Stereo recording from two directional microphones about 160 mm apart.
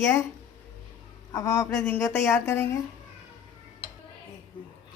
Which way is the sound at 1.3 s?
15° left (ahead or behind).